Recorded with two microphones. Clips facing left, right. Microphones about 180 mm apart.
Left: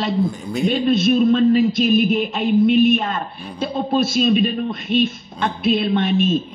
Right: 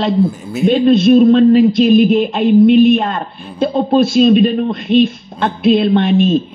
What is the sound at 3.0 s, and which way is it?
A man's voice, 55° right (ahead or behind).